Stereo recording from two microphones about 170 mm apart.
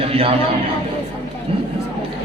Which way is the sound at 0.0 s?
35° right (ahead or behind).